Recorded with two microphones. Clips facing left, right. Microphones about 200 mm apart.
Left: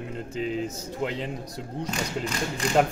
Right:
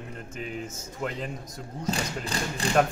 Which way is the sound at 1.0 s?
25° left (ahead or behind).